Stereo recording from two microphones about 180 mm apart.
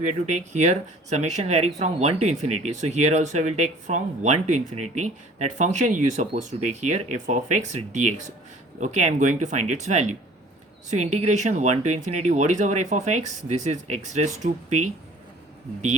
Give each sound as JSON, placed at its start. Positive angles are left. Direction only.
{"t": 0.3, "sound": "speech", "side_deg": -40}